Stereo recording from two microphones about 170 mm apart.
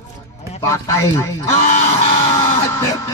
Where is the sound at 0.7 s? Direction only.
15° left (ahead or behind).